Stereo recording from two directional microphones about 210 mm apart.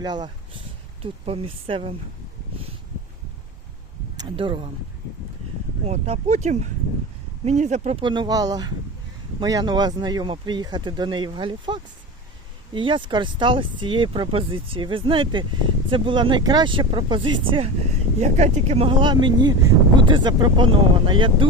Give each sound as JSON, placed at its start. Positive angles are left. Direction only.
{"t": 0.0, "sound": "speech", "side_deg": -20}
{"t": 4.2, "sound": "speech", "side_deg": -25}
{"t": 5.8, "sound": "speech", "side_deg": -30}